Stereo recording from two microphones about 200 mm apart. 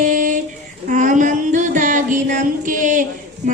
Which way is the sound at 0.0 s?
40° right (ahead or behind).